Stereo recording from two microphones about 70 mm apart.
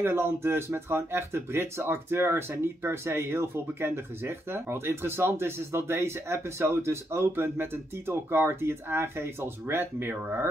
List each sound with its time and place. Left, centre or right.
0.0 s speech: right